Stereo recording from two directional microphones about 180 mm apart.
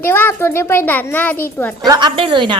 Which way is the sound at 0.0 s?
10° left (ahead or behind).